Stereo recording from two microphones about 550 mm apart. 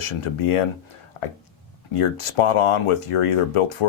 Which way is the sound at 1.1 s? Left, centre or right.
Left.